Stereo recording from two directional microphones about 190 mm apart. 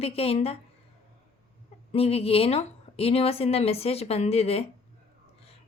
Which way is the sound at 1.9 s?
30° left (ahead or behind).